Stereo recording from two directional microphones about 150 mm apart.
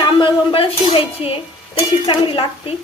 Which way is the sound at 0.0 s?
35° left (ahead or behind).